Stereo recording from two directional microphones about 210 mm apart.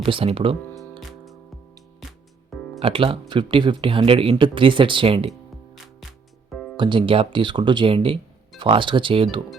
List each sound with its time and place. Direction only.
0.0 s speech: 25° right (ahead or behind)
0.7 s music: centre (ahead or behind)
2.8 s speech: 25° right (ahead or behind)
6.5 s music: centre (ahead or behind)
6.7 s speech: 25° right (ahead or behind)